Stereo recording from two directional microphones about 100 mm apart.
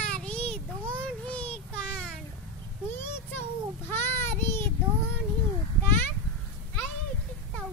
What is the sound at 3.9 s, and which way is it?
Child singing, 25° left (ahead or behind).